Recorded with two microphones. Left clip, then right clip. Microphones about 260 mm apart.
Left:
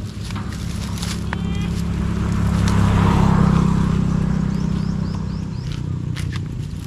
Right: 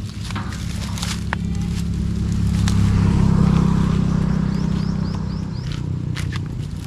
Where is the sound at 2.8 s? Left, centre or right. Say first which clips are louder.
Left 6 dB; left.